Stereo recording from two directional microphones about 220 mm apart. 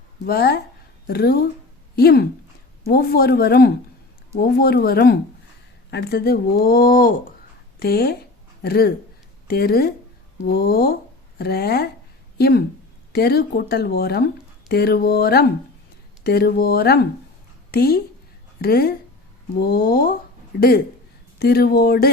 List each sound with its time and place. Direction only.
0.3 s a woman's voice: 45° left (ahead or behind)